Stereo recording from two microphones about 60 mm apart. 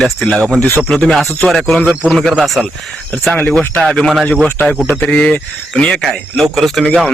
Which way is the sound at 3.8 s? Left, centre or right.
Centre.